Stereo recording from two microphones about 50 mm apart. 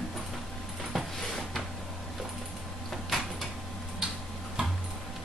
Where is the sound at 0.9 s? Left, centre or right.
Centre.